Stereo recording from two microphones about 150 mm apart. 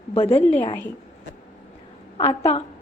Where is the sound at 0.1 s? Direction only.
40° left (ahead or behind).